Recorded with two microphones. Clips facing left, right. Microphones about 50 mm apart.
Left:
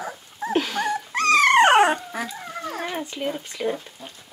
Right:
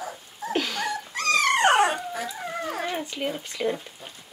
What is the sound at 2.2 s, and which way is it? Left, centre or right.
Dog, centre.